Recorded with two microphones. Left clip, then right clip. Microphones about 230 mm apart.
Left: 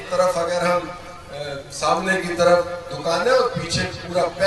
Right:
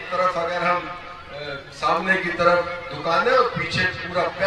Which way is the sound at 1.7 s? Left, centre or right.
Left.